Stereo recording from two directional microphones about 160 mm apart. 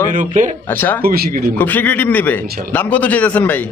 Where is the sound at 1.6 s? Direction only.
10° left (ahead or behind).